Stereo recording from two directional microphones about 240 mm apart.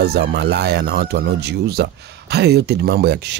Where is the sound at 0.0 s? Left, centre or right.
Right.